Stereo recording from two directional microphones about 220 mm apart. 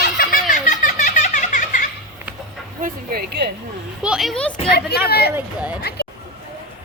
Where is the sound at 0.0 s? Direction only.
45° left (ahead or behind).